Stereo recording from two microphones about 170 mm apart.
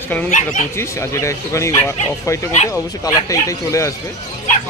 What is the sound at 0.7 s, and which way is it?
Speech, 15° left (ahead or behind).